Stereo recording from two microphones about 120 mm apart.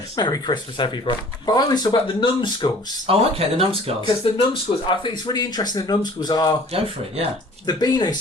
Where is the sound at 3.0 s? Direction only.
55° right (ahead or behind).